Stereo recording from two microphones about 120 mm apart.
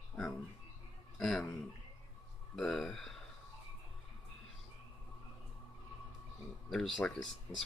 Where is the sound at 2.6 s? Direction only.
Centre (ahead or behind).